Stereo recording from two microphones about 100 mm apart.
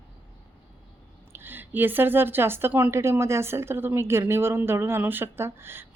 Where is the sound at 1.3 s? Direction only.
20° right (ahead or behind).